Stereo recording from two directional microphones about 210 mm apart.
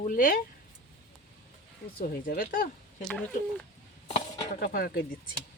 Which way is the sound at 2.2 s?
40° left (ahead or behind).